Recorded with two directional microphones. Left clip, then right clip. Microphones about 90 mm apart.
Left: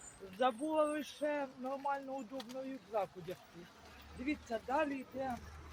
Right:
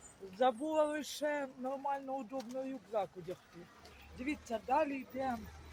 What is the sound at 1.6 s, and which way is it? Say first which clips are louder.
Speech: right 1 dB; 30° right (ahead or behind).